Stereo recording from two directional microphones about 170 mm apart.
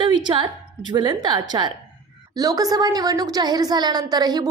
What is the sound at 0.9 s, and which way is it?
A woman's voice, 25° right (ahead or behind).